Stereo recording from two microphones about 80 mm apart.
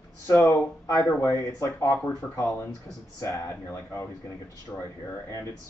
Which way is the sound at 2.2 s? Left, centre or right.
Centre.